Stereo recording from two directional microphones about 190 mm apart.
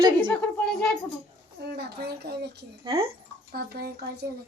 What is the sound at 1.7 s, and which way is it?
Speech, 60° right (ahead or behind).